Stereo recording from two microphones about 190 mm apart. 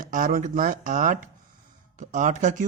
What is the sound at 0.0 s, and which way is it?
Speech, 45° right (ahead or behind).